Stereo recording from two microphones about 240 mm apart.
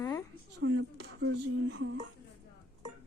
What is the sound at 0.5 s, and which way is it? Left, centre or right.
Speech, right.